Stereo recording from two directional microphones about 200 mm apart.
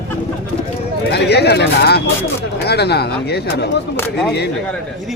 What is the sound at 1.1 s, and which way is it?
Speech, 55° left (ahead or behind).